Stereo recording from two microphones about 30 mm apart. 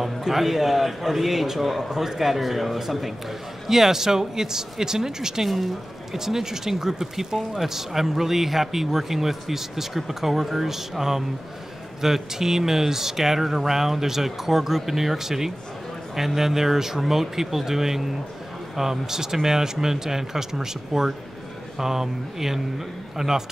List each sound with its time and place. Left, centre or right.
0.0 s speech: centre